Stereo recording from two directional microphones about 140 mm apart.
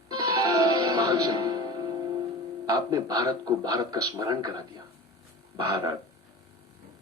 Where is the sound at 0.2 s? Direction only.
25° right (ahead or behind).